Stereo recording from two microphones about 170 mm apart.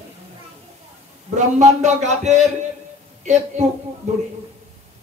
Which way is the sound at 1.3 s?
45° right (ahead or behind).